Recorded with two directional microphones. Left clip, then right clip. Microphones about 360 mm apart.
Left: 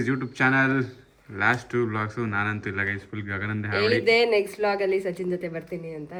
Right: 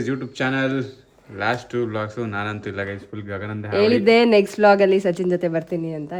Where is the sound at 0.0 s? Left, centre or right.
Centre.